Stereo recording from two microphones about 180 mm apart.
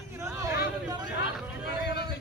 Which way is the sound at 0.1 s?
15° right (ahead or behind).